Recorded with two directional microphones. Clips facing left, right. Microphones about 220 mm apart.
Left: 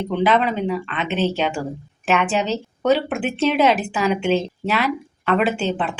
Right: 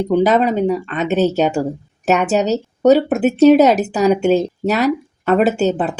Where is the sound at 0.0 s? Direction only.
40° right (ahead or behind).